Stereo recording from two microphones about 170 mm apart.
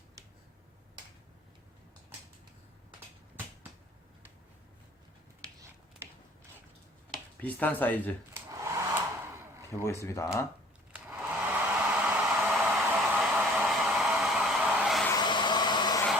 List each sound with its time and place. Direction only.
7.4 s speech: 10° left (ahead or behind)
8.3 s hair dryer: 15° right (ahead or behind)
9.8 s speech: 15° left (ahead or behind)
10.9 s hair dryer: 10° right (ahead or behind)
15.2 s a sound: 25° left (ahead or behind)